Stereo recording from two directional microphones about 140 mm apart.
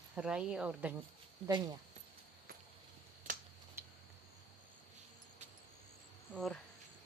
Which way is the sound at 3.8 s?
15° right (ahead or behind).